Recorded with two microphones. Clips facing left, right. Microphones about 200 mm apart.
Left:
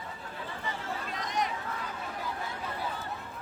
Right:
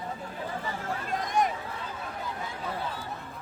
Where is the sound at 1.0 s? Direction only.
50° right (ahead or behind).